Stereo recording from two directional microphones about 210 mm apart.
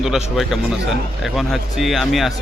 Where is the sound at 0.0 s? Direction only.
Centre (ahead or behind).